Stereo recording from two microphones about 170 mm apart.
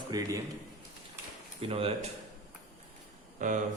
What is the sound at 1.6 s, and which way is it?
Speech, 35° right (ahead or behind).